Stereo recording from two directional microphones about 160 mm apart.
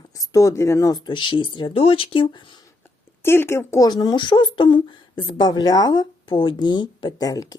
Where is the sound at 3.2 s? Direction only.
15° left (ahead or behind).